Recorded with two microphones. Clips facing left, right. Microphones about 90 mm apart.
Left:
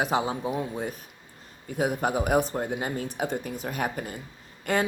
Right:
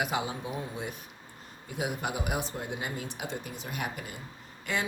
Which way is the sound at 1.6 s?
45° left (ahead or behind).